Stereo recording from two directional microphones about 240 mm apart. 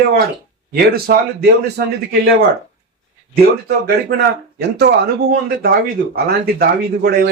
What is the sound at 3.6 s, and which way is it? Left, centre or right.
Speech, right.